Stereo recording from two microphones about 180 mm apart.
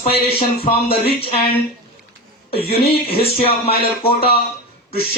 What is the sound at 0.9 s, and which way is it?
Speech, 30° left (ahead or behind).